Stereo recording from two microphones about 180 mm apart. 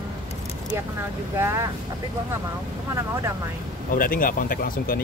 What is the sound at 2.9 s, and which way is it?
Speech, 15° right (ahead or behind).